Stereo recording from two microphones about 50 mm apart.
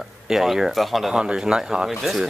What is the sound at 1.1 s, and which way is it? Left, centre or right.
Speech, centre.